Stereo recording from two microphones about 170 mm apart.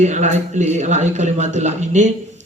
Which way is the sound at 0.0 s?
45° right (ahead or behind).